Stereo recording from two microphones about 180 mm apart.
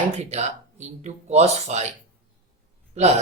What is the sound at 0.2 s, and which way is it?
A woman's voice, 40° right (ahead or behind).